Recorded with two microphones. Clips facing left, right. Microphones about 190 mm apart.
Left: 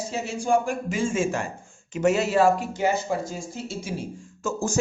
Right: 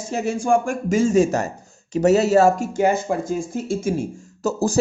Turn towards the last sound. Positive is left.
turn(degrees=-35)  # may be behind; listen again after turning